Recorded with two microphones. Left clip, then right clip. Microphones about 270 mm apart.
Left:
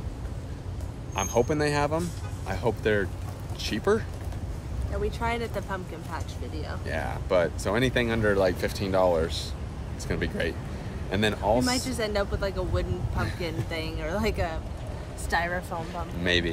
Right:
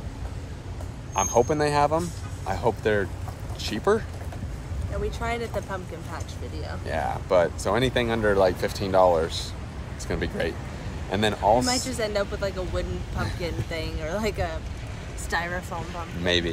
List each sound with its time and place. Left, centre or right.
1.1 s a man's voice: centre
5.2 s speech: centre
11.7 s speech: centre
16.2 s speech: centre